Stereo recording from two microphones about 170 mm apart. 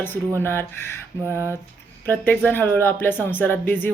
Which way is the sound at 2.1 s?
10° left (ahead or behind).